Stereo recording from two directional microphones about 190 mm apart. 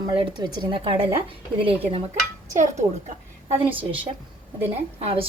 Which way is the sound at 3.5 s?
30° right (ahead or behind).